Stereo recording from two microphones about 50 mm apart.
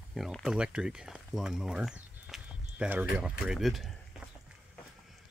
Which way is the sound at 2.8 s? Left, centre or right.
Right.